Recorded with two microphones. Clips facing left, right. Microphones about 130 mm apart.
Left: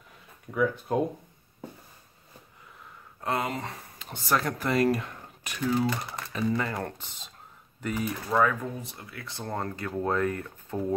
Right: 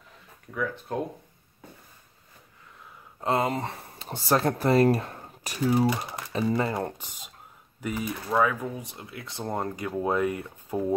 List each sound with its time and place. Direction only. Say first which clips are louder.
0.5 s speech: left 4 dB; 15° left (ahead or behind)
3.2 s speech: right 4 dB; 25° right (ahead or behind)
7.8 s speech: even; centre (ahead or behind)